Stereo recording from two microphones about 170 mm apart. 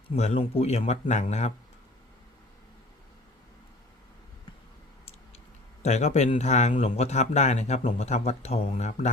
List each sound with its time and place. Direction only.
0.1 s speech: 35° left (ahead or behind)
5.8 s speech: 40° left (ahead or behind)